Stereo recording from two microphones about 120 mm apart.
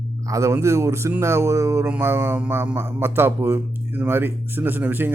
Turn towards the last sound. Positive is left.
turn(degrees=-15)  # may be behind; listen again after turning